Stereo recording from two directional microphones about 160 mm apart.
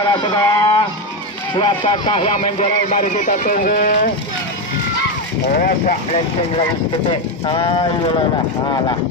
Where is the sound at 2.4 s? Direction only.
50° left (ahead or behind).